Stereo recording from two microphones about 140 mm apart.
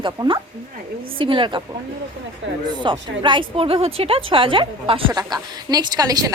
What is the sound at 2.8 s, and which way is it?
A woman's voice, 35° right (ahead or behind).